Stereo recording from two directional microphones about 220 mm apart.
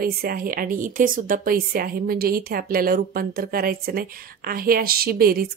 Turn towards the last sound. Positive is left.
turn(degrees=-40)  # may be behind; listen again after turning